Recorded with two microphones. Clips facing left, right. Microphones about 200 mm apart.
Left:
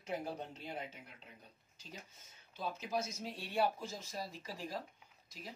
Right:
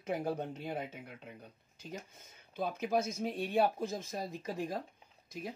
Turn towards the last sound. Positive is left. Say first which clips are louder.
# right 8 dB
turn(degrees=-50)  # may be behind; listen again after turning